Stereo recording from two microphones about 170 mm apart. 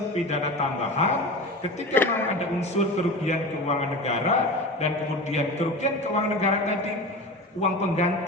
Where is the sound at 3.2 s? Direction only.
40° left (ahead or behind).